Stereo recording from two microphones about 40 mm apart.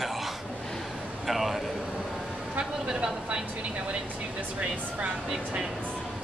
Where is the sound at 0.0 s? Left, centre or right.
Centre.